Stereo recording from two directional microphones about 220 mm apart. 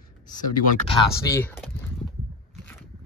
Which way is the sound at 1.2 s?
10° left (ahead or behind).